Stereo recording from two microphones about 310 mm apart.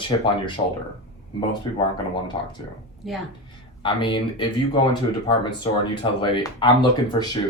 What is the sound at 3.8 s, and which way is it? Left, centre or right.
Speech, centre.